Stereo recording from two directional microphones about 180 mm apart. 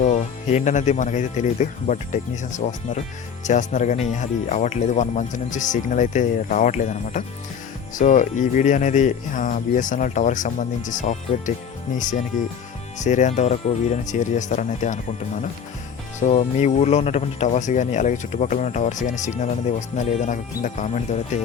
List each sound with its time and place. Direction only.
0.0 s speech: 40° left (ahead or behind)